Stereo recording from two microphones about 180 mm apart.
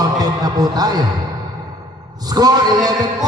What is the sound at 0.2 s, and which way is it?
Speech, 20° right (ahead or behind).